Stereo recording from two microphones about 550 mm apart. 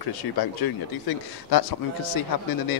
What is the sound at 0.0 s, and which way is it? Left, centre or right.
A man's voice, left.